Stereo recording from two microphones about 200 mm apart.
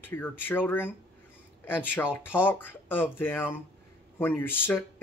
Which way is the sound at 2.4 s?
10° left (ahead or behind).